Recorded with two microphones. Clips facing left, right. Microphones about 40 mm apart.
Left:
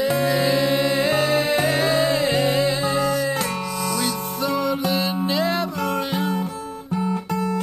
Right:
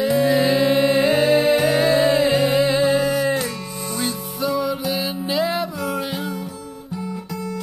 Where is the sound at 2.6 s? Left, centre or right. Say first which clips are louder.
Right 4 dB; right.